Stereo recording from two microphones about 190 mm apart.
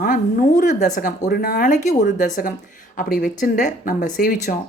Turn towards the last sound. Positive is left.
turn(degrees=45)  # may be behind; listen again after turning